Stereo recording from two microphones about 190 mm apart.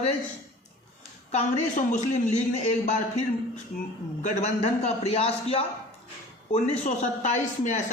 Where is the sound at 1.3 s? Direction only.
35° left (ahead or behind).